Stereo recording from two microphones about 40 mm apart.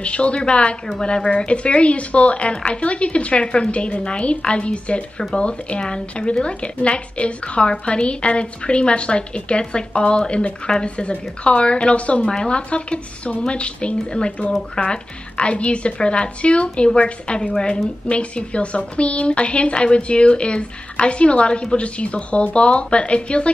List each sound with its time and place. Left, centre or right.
0.0 s a woman's voice: left